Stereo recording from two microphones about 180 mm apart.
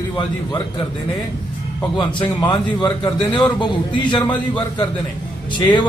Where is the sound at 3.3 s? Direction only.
10° left (ahead or behind).